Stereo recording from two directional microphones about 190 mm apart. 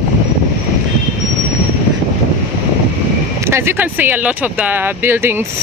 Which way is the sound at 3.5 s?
15° right (ahead or behind).